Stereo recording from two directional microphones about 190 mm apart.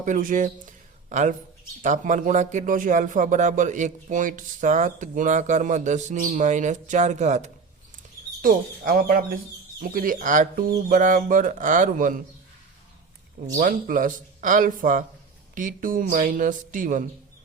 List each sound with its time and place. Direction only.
0.0 s speech: 45° right (ahead or behind)
13.6 s speech: 45° right (ahead or behind)